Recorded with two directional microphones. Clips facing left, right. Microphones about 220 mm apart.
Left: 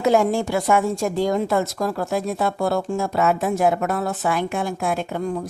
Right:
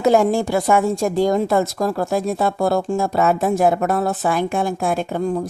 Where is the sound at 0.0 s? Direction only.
35° right (ahead or behind).